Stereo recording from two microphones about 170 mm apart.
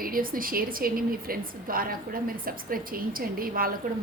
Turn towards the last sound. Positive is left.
turn(degrees=-60)  # may be behind; listen again after turning